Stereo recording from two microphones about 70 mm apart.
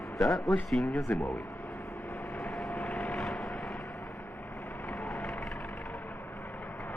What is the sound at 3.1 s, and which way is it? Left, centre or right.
Vehicle, centre.